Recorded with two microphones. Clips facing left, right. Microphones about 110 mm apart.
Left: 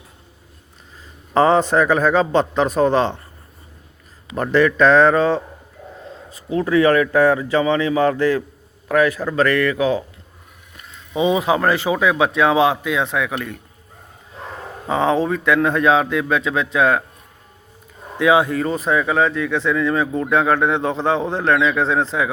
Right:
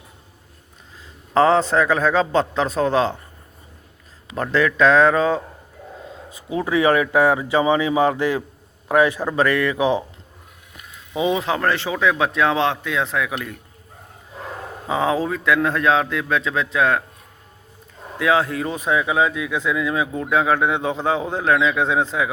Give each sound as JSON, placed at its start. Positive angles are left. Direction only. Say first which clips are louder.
{"t": 1.3, "sound": "speech", "louder": "left 1 dB", "side_deg": 5}
{"t": 4.4, "sound": "speech", "louder": "left 3 dB", "side_deg": 5}
{"t": 6.3, "sound": "speech", "louder": "left 4 dB", "side_deg": -15}
{"t": 10.8, "sound": "speech", "louder": "left 3 dB", "side_deg": -5}
{"t": 14.8, "sound": "speech", "louder": "left 3 dB", "side_deg": -5}
{"t": 18.2, "sound": "speech", "louder": "left 4 dB", "side_deg": 5}